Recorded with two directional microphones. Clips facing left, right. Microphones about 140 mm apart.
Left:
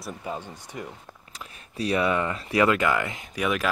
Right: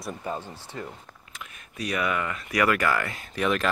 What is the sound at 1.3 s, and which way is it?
Speech, 35° left (ahead or behind).